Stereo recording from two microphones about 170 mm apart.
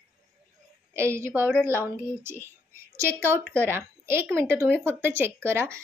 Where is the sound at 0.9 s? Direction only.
15° right (ahead or behind).